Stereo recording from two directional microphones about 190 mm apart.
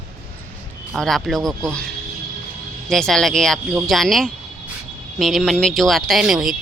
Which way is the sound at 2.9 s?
Centre (ahead or behind).